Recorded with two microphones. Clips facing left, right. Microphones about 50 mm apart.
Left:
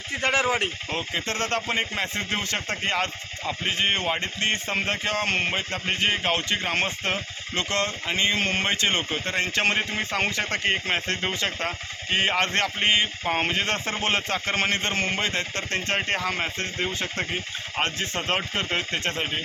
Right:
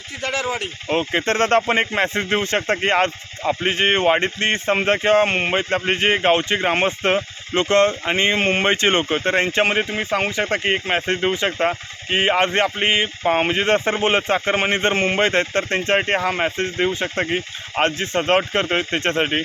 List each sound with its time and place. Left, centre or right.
0.1 s speech: left
0.9 s speech: right
9.6 s speech: centre
14.8 s speech: right